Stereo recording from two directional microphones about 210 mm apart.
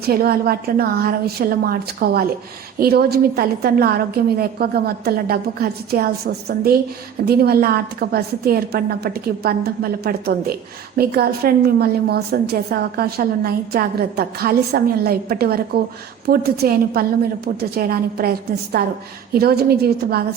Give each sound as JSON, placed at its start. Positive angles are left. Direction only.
{"t": 0.0, "sound": "a woman's voice", "side_deg": -45}